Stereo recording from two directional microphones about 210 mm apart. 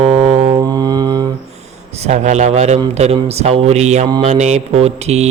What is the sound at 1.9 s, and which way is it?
Speech, 30° right (ahead or behind).